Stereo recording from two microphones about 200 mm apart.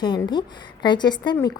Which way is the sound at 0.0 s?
25° left (ahead or behind).